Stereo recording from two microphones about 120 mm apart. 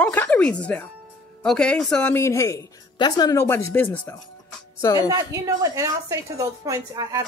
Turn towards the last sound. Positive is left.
turn(degrees=-30)  # may be behind; listen again after turning